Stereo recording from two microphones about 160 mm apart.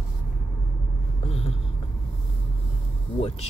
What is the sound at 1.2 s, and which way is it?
Speech, 35° left (ahead or behind).